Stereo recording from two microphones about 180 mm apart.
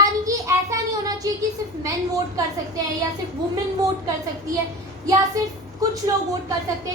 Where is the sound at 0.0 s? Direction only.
20° right (ahead or behind).